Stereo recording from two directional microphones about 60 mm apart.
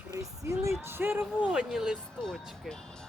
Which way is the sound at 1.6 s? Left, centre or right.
Centre.